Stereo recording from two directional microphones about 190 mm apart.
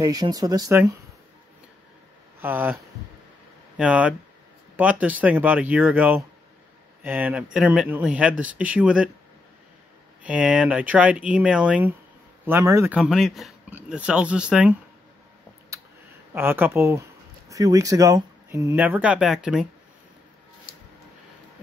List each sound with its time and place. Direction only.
0.0 s speech: 20° right (ahead or behind)
2.4 s speech: 10° right (ahead or behind)
3.7 s speech: 5° right (ahead or behind)
10.2 s speech: 5° right (ahead or behind)
12.9 s speech: centre (ahead or behind)
16.3 s speech: 10° right (ahead or behind)